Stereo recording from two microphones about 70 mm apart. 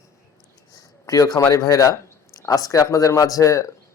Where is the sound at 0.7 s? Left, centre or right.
Left.